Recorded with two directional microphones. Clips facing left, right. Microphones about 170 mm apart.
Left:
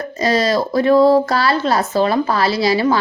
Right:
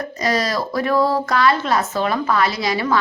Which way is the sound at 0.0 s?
30° left (ahead or behind).